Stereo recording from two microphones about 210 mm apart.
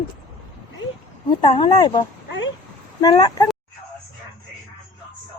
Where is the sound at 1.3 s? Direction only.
20° left (ahead or behind).